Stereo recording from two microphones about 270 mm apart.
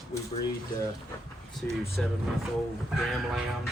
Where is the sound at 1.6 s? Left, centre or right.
Centre.